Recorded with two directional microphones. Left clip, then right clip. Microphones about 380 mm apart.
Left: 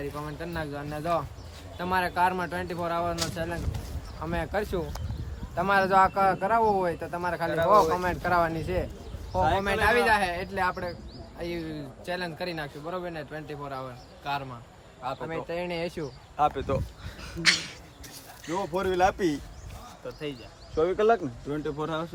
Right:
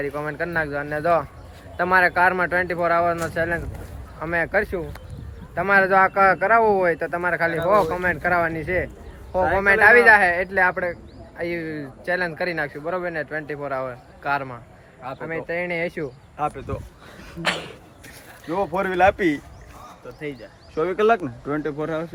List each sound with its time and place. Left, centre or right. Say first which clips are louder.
0.0 s a man's voice: right 9 dB; centre
16.7 s speech: left 3 dB; left
17.4 s speech: left 1 dB; centre
20.8 s speech: right 4 dB; right
21.5 s a man's voice: right 6 dB; centre